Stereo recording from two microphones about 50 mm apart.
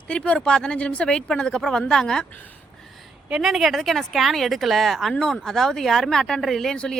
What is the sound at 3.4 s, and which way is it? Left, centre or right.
Speech, centre.